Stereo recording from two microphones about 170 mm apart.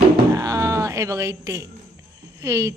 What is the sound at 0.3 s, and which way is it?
Music, 20° right (ahead or behind).